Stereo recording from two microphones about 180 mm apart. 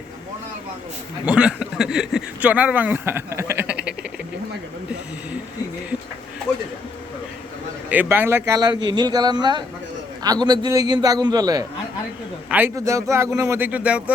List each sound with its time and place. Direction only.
1.2 s speech: 5° right (ahead or behind)
7.9 s speech: 10° right (ahead or behind)